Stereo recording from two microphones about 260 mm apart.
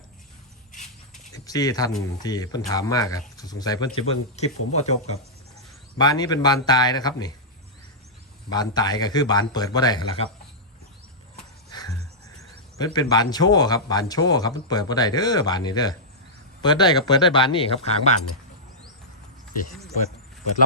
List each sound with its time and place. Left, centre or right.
1.3 s a sound: centre
2.2 s speech: centre
6.0 s speech: centre
8.4 s speech: centre
11.7 s wheeze: centre
12.4 s speech: centre